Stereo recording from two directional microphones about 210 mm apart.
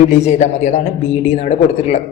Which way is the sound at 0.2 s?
35° left (ahead or behind).